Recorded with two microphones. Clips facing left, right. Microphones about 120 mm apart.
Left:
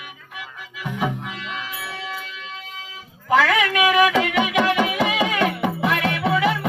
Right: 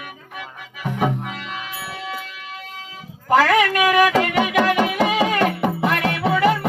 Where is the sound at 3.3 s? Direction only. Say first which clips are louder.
Right 3 dB; centre (ahead or behind).